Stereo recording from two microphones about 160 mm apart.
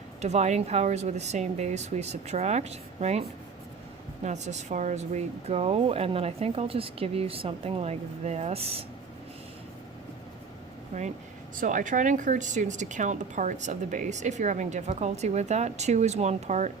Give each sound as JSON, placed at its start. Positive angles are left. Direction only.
{"t": 0.2, "sound": "speech", "side_deg": -45}
{"t": 11.5, "sound": "speech", "side_deg": -55}